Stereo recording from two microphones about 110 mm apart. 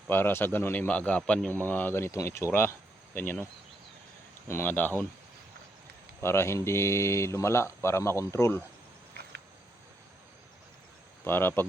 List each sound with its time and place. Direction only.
0.1 s a man's voice: 20° left (ahead or behind)
4.4 s speech: 20° left (ahead or behind)
6.2 s a man's voice: 25° left (ahead or behind)
11.2 s speech: 20° left (ahead or behind)